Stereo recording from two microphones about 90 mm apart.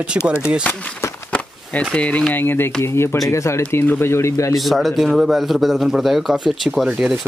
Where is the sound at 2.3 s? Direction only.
25° left (ahead or behind).